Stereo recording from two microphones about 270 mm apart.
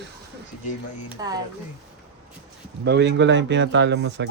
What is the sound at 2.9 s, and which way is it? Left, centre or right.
Speech, right.